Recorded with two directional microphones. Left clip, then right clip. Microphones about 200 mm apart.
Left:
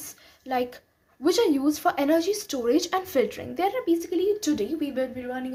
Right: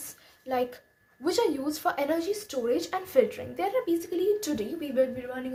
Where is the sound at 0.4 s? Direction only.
25° left (ahead or behind).